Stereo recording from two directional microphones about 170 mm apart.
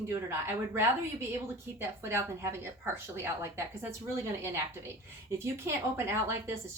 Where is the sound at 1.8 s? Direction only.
15° right (ahead or behind).